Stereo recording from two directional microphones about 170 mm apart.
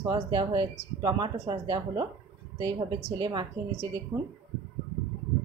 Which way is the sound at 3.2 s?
25° right (ahead or behind).